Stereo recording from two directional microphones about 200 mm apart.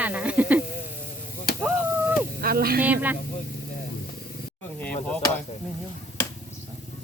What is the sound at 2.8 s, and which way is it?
Speech, 10° right (ahead or behind).